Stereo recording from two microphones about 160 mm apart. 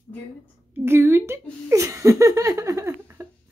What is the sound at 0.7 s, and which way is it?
Speech, 15° right (ahead or behind).